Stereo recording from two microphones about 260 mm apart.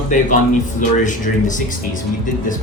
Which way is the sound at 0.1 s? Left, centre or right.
Left.